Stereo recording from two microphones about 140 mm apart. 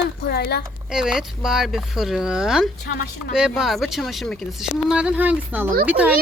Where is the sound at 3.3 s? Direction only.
5° right (ahead or behind).